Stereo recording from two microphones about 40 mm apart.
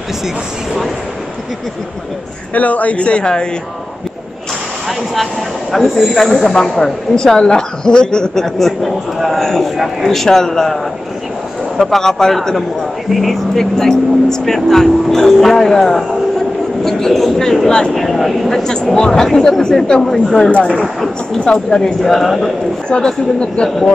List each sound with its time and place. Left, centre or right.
2.5 s speech: left
4.8 s speech: centre
8.5 s speech: centre
13.6 s speech: centre
17.6 s speech: centre
17.9 s speech: centre
18.6 s speech: centre
22.0 s speech: centre
22.8 s speech: left